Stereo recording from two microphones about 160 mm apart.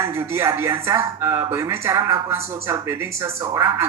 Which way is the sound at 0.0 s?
15° right (ahead or behind).